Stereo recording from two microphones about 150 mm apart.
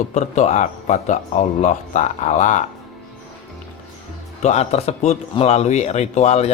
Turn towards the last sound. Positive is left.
turn(degrees=45)  # may be behind; listen again after turning